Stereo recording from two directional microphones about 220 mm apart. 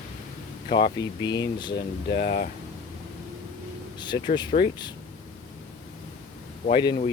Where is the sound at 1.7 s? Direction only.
40° left (ahead or behind).